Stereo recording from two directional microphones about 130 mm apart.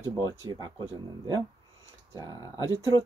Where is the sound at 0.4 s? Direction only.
30° right (ahead or behind).